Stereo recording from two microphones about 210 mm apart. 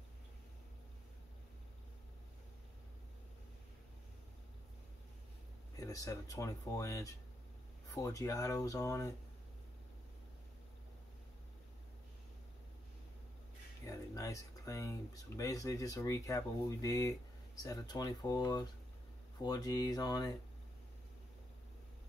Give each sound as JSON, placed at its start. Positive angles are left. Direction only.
{"t": 5.8, "sound": "speech", "side_deg": 15}
{"t": 13.8, "sound": "speech", "side_deg": 15}